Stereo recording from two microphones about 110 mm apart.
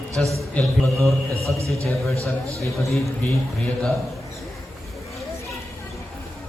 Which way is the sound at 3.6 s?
5° left (ahead or behind).